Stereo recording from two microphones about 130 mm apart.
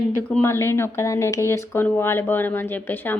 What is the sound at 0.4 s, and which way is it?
Speech, 20° left (ahead or behind).